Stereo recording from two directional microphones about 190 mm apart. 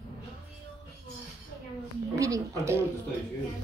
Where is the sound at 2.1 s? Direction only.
15° right (ahead or behind).